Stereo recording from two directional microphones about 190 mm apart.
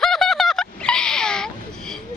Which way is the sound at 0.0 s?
Centre (ahead or behind).